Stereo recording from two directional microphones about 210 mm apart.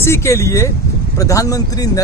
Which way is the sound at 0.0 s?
10° left (ahead or behind).